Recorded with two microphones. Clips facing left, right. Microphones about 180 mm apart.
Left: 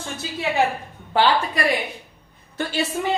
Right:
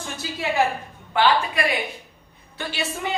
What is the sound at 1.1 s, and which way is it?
Speech, 35° left (ahead or behind).